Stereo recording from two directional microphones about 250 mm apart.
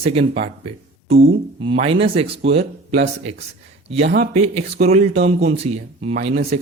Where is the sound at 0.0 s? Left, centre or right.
Right.